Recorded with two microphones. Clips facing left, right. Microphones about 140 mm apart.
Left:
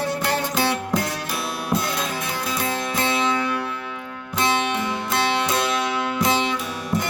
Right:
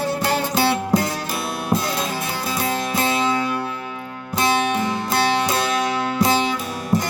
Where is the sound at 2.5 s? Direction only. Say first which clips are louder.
Right 3 dB; 35° right (ahead or behind).